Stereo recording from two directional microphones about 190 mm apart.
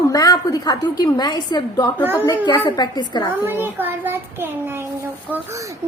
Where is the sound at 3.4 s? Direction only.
10° right (ahead or behind).